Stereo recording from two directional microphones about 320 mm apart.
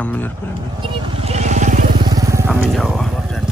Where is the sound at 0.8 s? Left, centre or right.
Centre.